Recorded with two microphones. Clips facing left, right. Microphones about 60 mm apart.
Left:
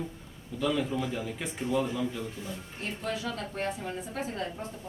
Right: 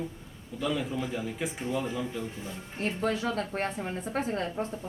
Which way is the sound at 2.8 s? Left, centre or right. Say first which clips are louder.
Right 5 dB; right.